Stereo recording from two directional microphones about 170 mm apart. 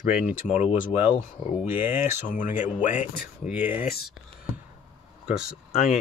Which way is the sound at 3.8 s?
60° left (ahead or behind).